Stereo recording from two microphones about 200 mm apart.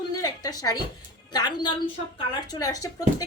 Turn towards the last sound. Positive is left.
turn(degrees=15)  # may be behind; listen again after turning